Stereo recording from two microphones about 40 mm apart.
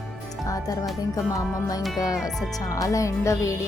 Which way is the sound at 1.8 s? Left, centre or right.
Centre.